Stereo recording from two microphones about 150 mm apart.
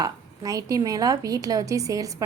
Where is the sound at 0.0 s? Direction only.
25° right (ahead or behind).